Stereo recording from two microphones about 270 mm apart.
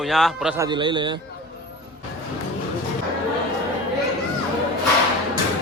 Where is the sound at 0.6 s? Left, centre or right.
Centre.